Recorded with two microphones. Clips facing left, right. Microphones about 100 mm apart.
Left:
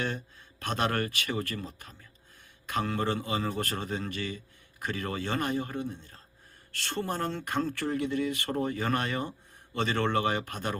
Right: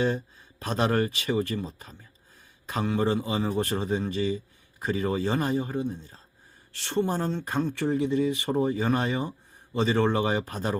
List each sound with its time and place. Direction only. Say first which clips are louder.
0.6 s speech: right 4 dB; 30° right (ahead or behind)